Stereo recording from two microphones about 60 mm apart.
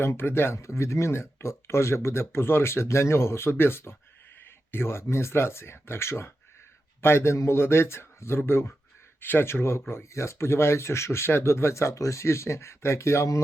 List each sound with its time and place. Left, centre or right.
0.0 s speech: left
0.6 s speech: left